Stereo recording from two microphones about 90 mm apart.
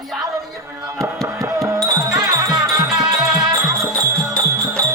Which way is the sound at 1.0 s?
35° right (ahead or behind).